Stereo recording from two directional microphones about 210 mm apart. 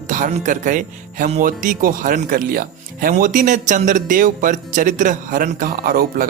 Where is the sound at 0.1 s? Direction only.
35° right (ahead or behind).